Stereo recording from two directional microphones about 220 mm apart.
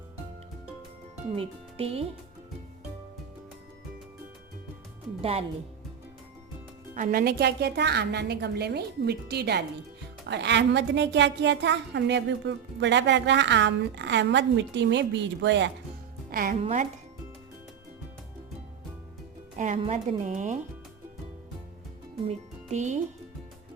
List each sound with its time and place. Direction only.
1.4 s speech: 25° right (ahead or behind)
5.2 s speech: 25° right (ahead or behind)
6.9 s a woman's voice: 40° right (ahead or behind)
16.3 s speech: 45° right (ahead or behind)
16.6 s speech: 30° right (ahead or behind)
19.5 s speech: 30° right (ahead or behind)
22.3 s speech: 30° right (ahead or behind)